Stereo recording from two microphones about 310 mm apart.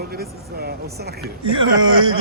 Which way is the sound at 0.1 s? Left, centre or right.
Right.